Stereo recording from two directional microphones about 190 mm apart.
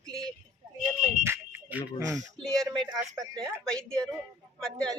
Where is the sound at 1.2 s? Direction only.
15° right (ahead or behind).